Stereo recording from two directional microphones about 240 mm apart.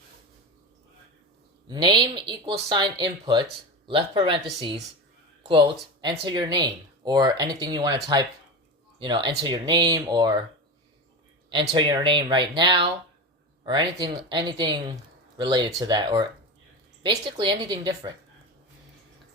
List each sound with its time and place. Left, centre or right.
1.6 s speech: centre
5.5 s speech: right
11.4 s speech: centre